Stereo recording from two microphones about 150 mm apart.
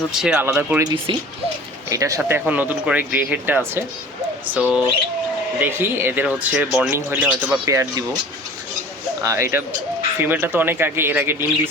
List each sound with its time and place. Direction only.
0.2 s speech: 5° right (ahead or behind)
0.4 s speech: 15° right (ahead or behind)
7.6 s speech: 20° right (ahead or behind)
9.2 s speech: 20° right (ahead or behind)